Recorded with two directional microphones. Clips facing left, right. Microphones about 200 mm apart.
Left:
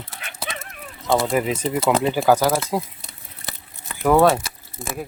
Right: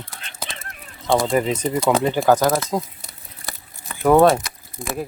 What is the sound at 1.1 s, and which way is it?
Speech, 5° left (ahead or behind).